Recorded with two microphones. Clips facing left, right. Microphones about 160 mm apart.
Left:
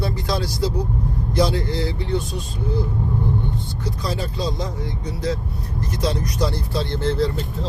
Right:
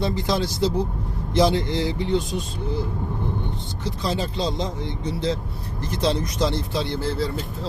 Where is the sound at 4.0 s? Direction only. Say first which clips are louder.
Right 2 dB; 25° right (ahead or behind).